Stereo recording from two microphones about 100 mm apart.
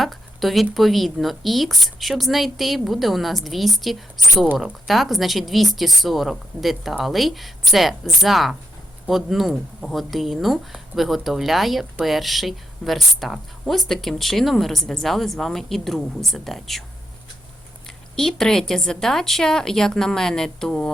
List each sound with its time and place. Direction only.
0.0 s a woman's voice: centre (ahead or behind)
17.8 s a woman's voice: 5° left (ahead or behind)